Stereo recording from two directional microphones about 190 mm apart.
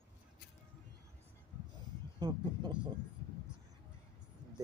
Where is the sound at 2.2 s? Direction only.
20° right (ahead or behind).